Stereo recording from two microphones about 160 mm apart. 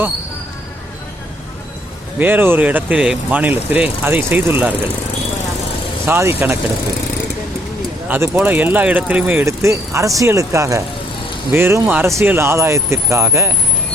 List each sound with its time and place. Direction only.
2.1 s speech: 10° right (ahead or behind)
6.1 s speech: 15° right (ahead or behind)
8.0 s speech: 10° right (ahead or behind)